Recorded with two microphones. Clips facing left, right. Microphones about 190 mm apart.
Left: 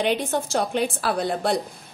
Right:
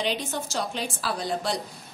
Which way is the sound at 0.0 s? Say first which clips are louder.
Left 6 dB; 55° left (ahead or behind).